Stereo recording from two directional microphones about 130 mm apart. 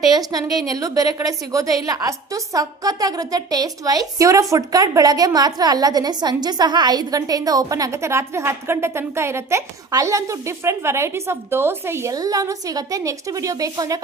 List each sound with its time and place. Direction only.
0.1 s a woman's voice: 30° right (ahead or behind)